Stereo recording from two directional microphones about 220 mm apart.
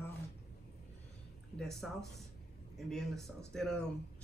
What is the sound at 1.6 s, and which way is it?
Speech, centre (ahead or behind).